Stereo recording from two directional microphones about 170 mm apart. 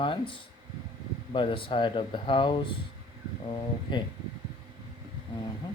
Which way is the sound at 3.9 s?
30° left (ahead or behind).